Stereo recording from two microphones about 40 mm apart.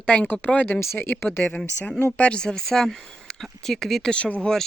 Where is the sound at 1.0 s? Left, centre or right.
Left.